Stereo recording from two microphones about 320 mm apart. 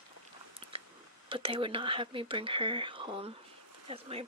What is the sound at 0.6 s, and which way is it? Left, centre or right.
Biting, centre.